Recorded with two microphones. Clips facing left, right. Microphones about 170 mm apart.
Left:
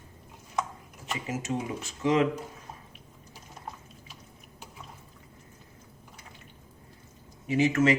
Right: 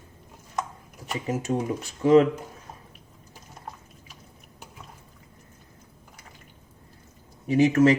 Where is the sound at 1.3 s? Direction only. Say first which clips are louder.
Right 6 dB; 40° right (ahead or behind).